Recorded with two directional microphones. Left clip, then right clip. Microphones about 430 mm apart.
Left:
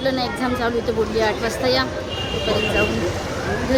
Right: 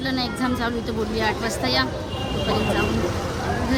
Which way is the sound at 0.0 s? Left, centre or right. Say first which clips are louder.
Left 4 dB; centre.